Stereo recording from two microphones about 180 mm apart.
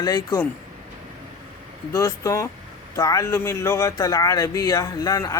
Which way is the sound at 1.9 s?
20° left (ahead or behind).